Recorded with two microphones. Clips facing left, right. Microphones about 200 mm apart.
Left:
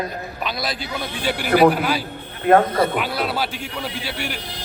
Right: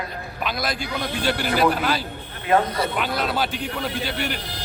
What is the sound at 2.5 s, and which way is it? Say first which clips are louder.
Speech: left 5 dB; 50° left (ahead or behind).